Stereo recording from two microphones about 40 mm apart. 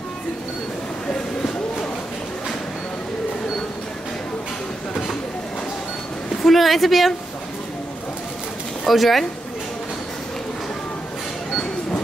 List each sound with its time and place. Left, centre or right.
6.4 s a woman's voice: centre
8.8 s speech: centre